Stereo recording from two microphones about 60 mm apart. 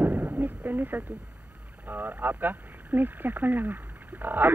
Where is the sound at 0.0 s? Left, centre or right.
Right.